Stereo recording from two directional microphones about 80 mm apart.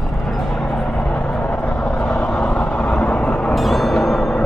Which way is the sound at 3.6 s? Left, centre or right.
Centre.